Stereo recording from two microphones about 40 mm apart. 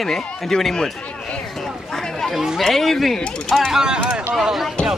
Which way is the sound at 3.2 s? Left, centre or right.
Left.